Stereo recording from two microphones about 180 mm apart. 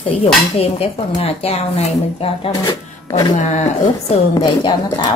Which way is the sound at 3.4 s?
40° left (ahead or behind).